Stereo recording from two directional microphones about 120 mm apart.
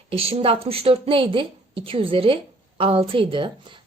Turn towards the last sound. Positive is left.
turn(degrees=-45)  # may be behind; listen again after turning